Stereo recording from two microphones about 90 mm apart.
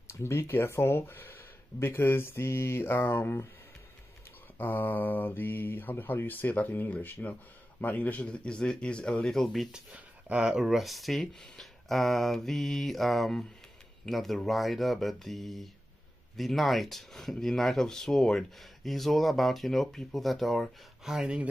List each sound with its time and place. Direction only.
0.1 s speech: 30° left (ahead or behind)
4.6 s speech: 20° left (ahead or behind); by 9.7 s 5° left (ahead or behind)
9.7 s speech: 15° right (ahead or behind)
10.6 s speech: centre (ahead or behind)